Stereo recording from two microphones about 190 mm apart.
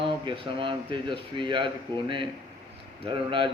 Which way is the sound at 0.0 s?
25° right (ahead or behind).